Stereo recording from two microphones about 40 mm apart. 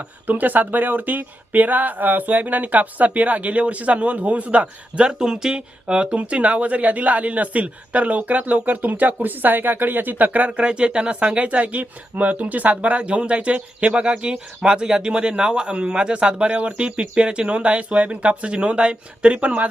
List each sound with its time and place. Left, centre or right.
0.3 s speech: right
5.2 s speech: centre
6.1 s speech: right
10.6 s speech: right
12.7 s speech: right